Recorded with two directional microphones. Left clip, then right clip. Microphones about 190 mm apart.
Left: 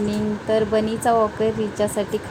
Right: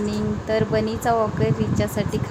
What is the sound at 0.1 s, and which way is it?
Speech, 20° left (ahead or behind).